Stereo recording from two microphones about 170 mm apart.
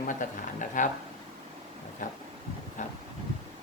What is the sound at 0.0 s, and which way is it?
Speech, 50° left (ahead or behind).